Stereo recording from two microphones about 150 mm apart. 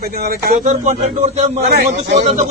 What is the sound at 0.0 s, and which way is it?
Speech, 90° right.